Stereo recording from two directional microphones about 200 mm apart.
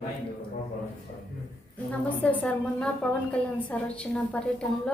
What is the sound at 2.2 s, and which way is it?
A man's voice, 5° left (ahead or behind).